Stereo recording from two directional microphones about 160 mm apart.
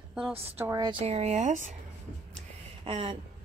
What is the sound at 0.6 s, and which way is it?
Speech, 20° right (ahead or behind).